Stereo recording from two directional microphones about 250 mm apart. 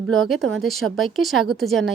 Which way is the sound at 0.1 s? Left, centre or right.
Centre.